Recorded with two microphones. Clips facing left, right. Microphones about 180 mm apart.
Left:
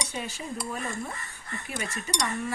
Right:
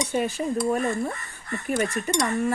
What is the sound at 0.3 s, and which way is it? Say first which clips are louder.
Speech: right 11 dB; 50° right (ahead or behind).